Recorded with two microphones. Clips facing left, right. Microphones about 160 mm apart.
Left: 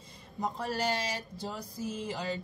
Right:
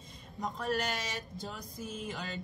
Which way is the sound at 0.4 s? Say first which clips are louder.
Left 1 dB; 30° left (ahead or behind).